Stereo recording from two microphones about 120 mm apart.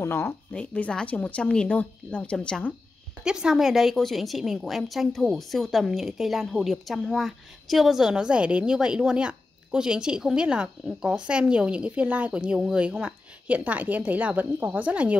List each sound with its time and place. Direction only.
0.0 s speech: 20° left (ahead or behind)
0.5 s speech: 10° left (ahead or behind)
3.3 s a woman's voice: 5° right (ahead or behind)